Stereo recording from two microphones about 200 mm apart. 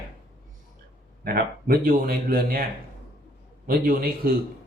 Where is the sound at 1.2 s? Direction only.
50° right (ahead or behind).